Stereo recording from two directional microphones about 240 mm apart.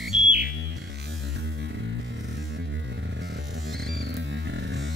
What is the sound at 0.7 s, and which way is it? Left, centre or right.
Music, right.